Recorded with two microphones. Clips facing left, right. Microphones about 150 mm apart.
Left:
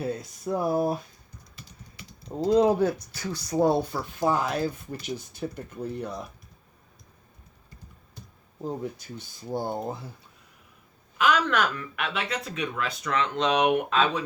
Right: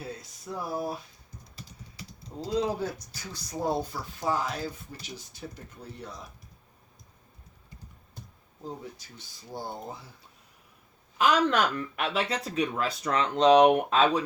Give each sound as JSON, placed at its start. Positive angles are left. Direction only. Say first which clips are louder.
{"t": 0.0, "sound": "speech", "louder": "left 9 dB", "side_deg": 55}
{"t": 2.4, "sound": "speech", "louder": "left 8 dB", "side_deg": 55}
{"t": 8.6, "sound": "speech", "louder": "left 7 dB", "side_deg": 55}
{"t": 11.2, "sound": "speech", "louder": "even", "side_deg": -35}